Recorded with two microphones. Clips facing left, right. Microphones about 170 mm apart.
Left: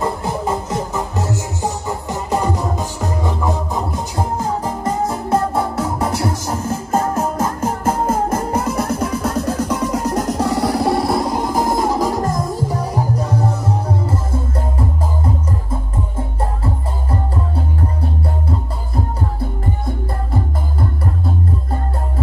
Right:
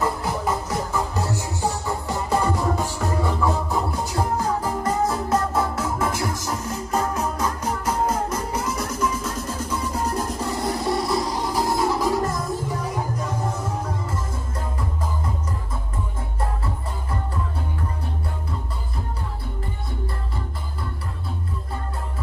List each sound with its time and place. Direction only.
0.0 s music: 25° left (ahead or behind)